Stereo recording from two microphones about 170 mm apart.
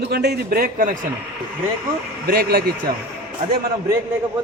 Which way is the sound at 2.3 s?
65° right (ahead or behind).